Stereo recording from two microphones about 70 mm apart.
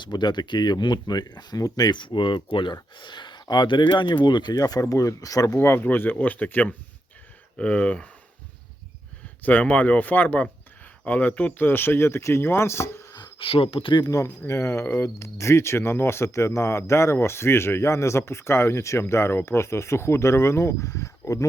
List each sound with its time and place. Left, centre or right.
0.0 s speech: left
5.5 s speech: left; by 8.1 s centre
9.4 s speech: left